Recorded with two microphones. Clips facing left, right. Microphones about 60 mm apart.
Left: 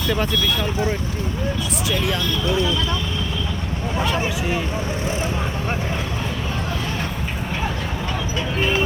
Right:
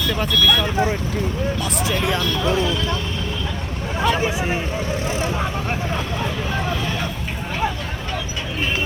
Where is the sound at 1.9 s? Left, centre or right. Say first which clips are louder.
Right 1 dB; right.